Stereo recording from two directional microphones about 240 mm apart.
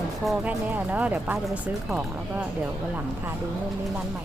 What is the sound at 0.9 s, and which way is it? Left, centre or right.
Speech, centre.